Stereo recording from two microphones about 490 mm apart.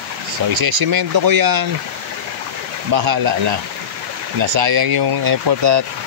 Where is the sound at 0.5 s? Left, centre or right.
Right.